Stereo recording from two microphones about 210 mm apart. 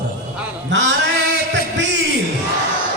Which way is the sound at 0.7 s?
60° right (ahead or behind).